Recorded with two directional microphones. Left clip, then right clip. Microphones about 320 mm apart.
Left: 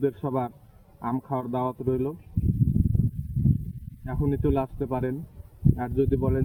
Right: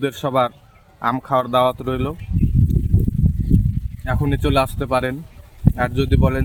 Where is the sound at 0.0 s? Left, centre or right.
Centre.